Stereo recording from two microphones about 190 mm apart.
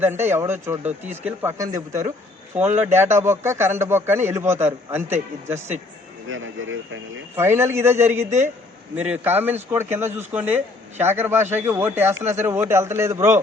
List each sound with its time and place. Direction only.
0.0 s a man's voice: 10° right (ahead or behind)
6.2 s speech: 90° right
7.3 s a man's voice: 15° right (ahead or behind)